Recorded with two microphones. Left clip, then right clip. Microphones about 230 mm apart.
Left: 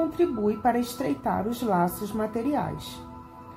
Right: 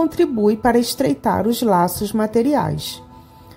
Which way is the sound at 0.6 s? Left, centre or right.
Right.